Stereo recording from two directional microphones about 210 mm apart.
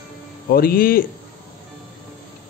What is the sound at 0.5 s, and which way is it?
Speech, 45° left (ahead or behind).